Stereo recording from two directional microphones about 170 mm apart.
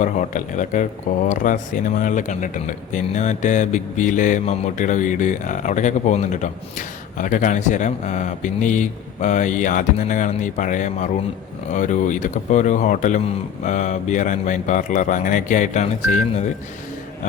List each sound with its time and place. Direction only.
0.0 s mantra: 50° left (ahead or behind)